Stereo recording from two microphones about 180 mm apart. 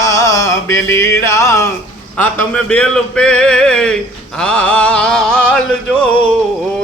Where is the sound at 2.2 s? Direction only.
5° left (ahead or behind).